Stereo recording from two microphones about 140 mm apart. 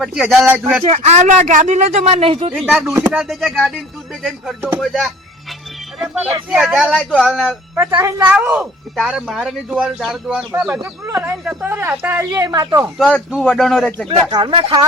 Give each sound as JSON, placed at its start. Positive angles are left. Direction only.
{"t": 0.0, "sound": "speech", "side_deg": -5}
{"t": 0.9, "sound": "speech", "side_deg": -50}
{"t": 2.6, "sound": "speech", "side_deg": 0}
{"t": 4.8, "sound": "music", "side_deg": 0}
{"t": 6.1, "sound": "speech", "side_deg": -5}
{"t": 7.8, "sound": "speech", "side_deg": -15}
{"t": 13.0, "sound": "speech", "side_deg": 10}
{"t": 14.3, "sound": "speech", "side_deg": -25}